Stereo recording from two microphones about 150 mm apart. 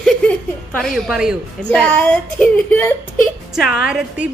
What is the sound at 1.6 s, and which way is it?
A woman's voice, 10° left (ahead or behind).